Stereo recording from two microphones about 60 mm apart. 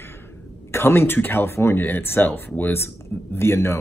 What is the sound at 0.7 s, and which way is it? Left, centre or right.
Speech, left.